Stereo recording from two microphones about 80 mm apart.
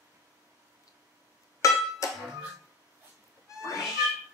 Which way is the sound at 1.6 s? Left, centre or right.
Left.